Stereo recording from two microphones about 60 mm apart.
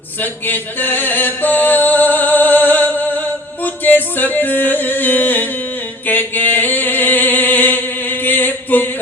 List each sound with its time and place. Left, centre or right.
0.2 s music: left
6.1 s chant: left